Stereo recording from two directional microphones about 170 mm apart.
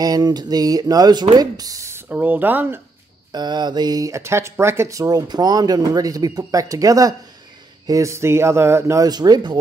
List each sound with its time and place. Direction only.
0.0 s speech: 25° right (ahead or behind)
3.3 s speech: 25° right (ahead or behind)